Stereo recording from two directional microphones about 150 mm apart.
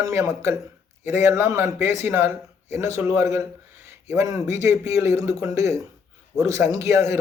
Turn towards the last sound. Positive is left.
turn(degrees=-20)  # may be behind; listen again after turning